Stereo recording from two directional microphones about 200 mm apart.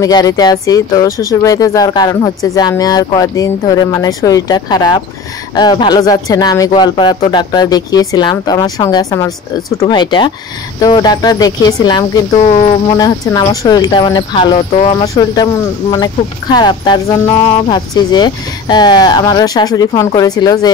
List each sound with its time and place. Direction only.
0.0 s speech: 20° left (ahead or behind)
12.4 s a sound: 30° left (ahead or behind)
12.9 s speech: 20° left (ahead or behind)
16.5 s speech: 20° left (ahead or behind)